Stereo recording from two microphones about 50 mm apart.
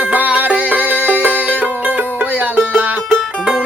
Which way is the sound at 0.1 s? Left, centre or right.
Right.